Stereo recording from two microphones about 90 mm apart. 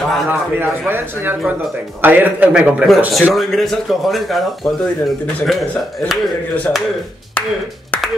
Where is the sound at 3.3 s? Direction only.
Centre (ahead or behind).